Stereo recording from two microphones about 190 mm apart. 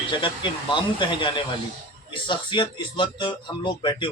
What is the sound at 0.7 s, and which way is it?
A man's voice, 25° left (ahead or behind).